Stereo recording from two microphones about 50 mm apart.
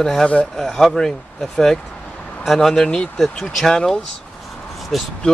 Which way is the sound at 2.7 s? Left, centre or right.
Centre.